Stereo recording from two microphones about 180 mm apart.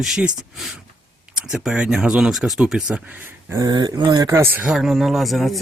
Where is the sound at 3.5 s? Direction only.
20° right (ahead or behind).